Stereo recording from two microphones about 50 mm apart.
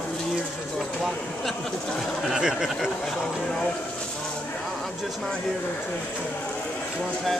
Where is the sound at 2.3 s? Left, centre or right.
Centre.